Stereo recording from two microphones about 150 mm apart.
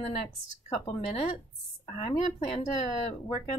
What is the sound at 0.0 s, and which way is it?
Speech, 40° left (ahead or behind).